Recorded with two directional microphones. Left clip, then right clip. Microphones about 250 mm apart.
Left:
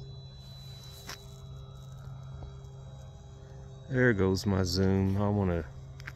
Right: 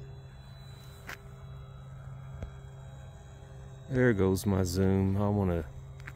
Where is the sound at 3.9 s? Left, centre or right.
Centre.